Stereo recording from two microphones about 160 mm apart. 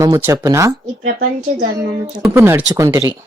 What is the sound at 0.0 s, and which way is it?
Speech, 20° right (ahead or behind).